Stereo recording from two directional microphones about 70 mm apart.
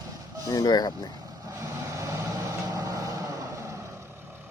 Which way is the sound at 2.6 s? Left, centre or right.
Right.